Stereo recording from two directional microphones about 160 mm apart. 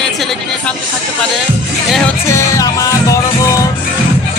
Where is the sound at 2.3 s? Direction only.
20° left (ahead or behind).